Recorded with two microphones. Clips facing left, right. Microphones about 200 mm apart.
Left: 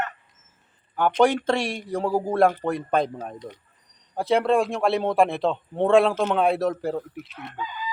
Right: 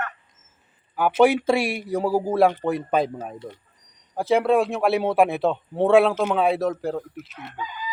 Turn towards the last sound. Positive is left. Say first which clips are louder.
# even
turn(degrees=0)  # may be behind; listen again after turning